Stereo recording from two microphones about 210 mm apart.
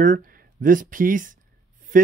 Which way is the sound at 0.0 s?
40° right (ahead or behind).